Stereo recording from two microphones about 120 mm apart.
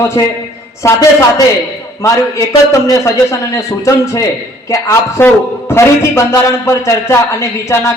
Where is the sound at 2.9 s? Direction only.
25° left (ahead or behind).